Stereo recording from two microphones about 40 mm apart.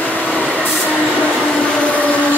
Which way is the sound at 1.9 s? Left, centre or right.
Left.